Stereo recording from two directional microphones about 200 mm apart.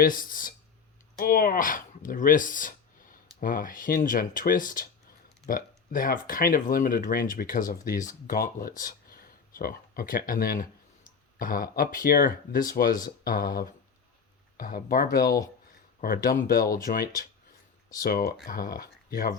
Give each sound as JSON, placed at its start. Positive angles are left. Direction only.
{"t": 0.0, "sound": "speech", "side_deg": 45}